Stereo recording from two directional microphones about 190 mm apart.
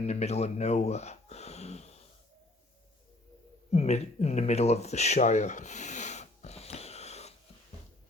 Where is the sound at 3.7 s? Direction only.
35° left (ahead or behind).